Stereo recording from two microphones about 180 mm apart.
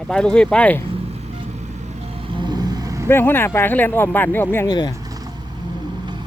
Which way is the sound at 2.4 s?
20° right (ahead or behind).